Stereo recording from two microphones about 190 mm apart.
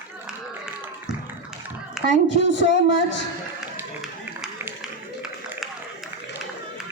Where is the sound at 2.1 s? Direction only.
70° left (ahead or behind).